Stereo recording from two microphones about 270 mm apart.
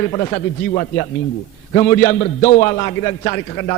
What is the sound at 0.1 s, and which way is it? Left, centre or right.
A man's voice, centre.